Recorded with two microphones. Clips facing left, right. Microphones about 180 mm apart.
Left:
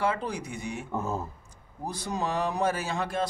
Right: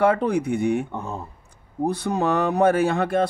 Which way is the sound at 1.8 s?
60° right (ahead or behind).